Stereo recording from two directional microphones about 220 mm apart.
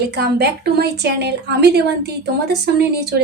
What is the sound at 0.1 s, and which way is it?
A woman's voice, 50° right (ahead or behind).